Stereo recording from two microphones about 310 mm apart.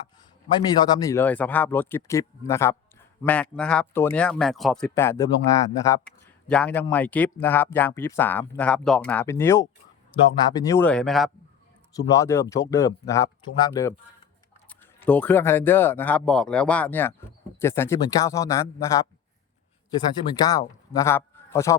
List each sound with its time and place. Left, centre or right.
0.5 s speech: centre
20.3 s a man's voice: centre